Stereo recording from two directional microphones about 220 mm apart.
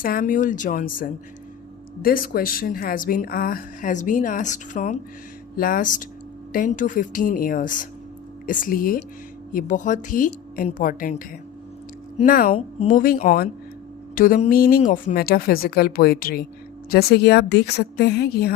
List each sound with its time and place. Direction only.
0.0 s a woman's voice: 40° left (ahead or behind)